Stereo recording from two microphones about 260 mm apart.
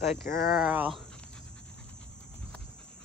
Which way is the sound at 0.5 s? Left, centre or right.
Centre.